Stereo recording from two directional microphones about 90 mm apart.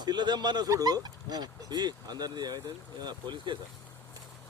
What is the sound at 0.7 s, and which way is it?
Speech, 45° right (ahead or behind).